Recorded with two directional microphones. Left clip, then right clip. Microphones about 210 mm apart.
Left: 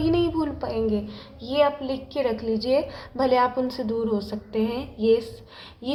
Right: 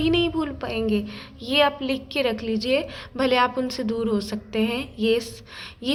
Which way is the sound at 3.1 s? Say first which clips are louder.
Even; 20° right (ahead or behind).